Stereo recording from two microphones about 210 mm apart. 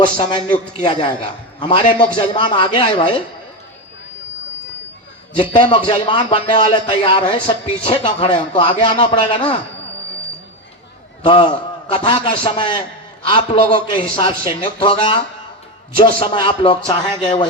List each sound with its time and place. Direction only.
0.2 s a man's voice: 25° left (ahead or behind)
5.4 s a man's voice: 25° left (ahead or behind)
11.2 s a man's voice: 25° left (ahead or behind)